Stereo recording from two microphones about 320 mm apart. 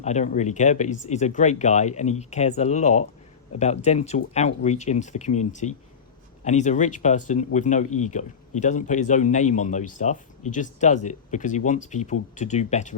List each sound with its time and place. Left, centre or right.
0.0 s a man's voice: left